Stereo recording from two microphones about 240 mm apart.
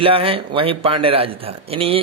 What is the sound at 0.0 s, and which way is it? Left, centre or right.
A man's voice, right.